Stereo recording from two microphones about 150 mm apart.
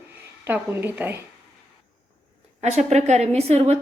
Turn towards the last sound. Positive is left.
turn(degrees=-45)  # may be behind; listen again after turning